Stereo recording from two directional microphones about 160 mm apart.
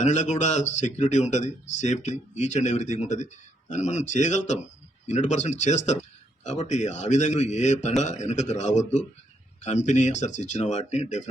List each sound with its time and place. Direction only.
0.0 s speech: 50° left (ahead or behind)